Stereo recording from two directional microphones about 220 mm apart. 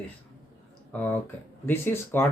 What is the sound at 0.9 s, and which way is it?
Speech, 5° left (ahead or behind).